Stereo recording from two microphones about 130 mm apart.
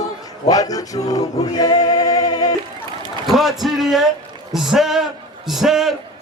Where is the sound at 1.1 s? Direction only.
30° left (ahead or behind).